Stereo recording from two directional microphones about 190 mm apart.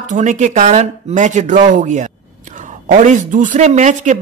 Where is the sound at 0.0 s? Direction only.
40° right (ahead or behind).